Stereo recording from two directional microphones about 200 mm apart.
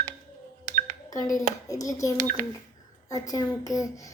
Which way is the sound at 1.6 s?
15° left (ahead or behind).